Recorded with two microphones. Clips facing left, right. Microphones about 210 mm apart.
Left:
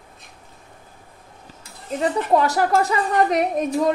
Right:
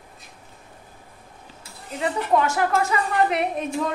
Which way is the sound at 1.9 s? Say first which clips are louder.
Left 3 dB; 35° left (ahead or behind).